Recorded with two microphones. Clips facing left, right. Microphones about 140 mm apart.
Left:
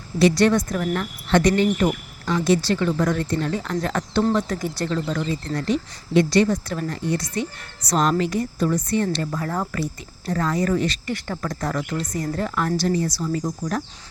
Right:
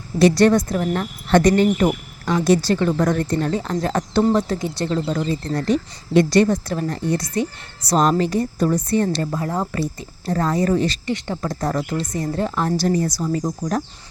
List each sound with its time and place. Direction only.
0.2 s a woman's voice: 40° right (ahead or behind)
1.3 s a woman's voice: 40° right (ahead or behind)
4.5 s a woman's voice: 20° right (ahead or behind)
9.3 s speech: 20° right (ahead or behind)
9.8 s a woman's voice: 35° right (ahead or behind)
11.1 s speech: 20° right (ahead or behind)
11.6 s a woman's voice: 35° right (ahead or behind)